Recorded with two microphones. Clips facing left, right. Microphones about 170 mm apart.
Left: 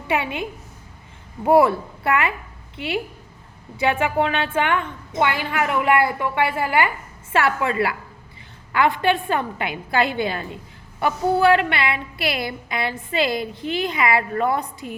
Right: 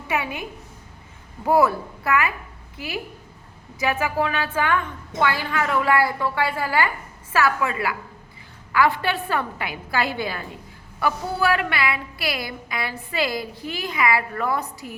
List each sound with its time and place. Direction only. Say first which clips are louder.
0.1 s a woman's voice: left 3 dB; 25° left (ahead or behind)
1.5 s a woman's voice: left 3 dB; 25° left (ahead or behind)